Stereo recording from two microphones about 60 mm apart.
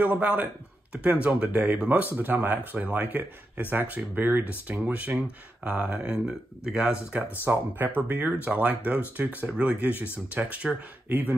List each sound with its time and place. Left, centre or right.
0.0 s speech: right
7.5 s speech: right
8.5 s speech: right
9.9 s speech: left
10.3 s speech: centre
11.1 s speech: right